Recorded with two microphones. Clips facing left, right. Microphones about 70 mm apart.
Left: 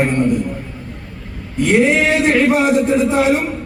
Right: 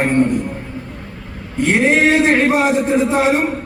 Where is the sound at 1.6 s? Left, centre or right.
Right.